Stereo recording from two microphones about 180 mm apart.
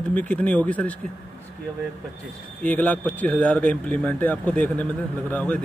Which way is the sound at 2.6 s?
10° left (ahead or behind).